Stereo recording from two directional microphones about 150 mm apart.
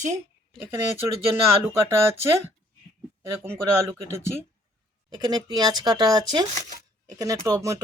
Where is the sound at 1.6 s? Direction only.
15° right (ahead or behind).